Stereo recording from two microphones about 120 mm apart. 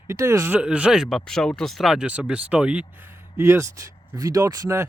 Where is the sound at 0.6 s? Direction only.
10° right (ahead or behind).